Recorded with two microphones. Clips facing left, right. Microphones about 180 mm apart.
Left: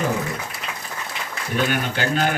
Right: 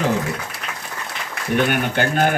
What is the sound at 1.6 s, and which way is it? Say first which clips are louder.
Speech: right 3 dB; 55° right (ahead or behind).